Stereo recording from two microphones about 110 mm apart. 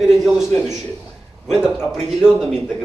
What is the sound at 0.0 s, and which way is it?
Speech, centre (ahead or behind).